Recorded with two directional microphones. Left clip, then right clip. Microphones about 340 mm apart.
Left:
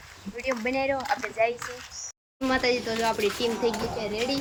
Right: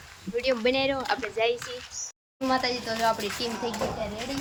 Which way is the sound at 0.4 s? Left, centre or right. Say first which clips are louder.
Right 2 dB; centre.